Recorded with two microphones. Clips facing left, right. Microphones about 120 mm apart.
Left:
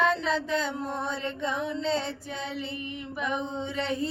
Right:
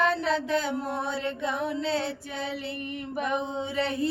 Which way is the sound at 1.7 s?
5° right (ahead or behind).